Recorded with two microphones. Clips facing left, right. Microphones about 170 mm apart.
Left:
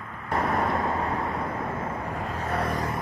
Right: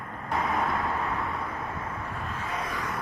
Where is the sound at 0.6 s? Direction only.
30° left (ahead or behind).